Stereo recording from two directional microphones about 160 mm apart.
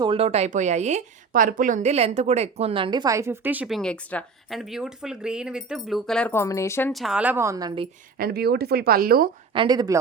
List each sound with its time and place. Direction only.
0.0 s speech: 35° right (ahead or behind); by 3.8 s 10° right (ahead or behind)
3.8 s speech: 5° left (ahead or behind)
6.3 s speech: 15° left (ahead or behind)
6.9 s a woman's voice: 5° right (ahead or behind); by 7.7 s 20° right (ahead or behind)
8.2 s speech: 75° right (ahead or behind)
9.5 s speech: 30° right (ahead or behind)